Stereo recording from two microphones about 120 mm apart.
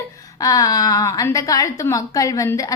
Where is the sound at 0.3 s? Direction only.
30° left (ahead or behind).